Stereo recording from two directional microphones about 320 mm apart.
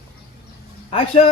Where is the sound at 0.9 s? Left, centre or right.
Centre.